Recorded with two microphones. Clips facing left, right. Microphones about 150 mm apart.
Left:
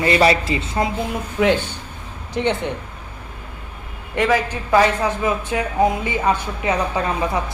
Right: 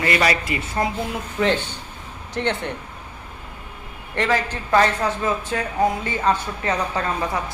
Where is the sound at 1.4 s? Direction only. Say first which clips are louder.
Left 3 dB; 10° left (ahead or behind).